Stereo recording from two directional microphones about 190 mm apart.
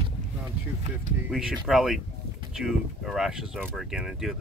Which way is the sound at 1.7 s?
Centre (ahead or behind).